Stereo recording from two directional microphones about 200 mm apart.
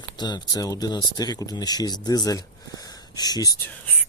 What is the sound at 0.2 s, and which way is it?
Speech, 20° left (ahead or behind).